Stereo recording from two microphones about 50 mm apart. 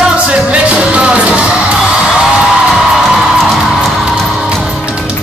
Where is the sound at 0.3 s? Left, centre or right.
Right.